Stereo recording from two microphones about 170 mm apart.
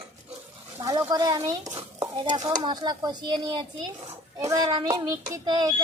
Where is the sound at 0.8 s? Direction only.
20° right (ahead or behind).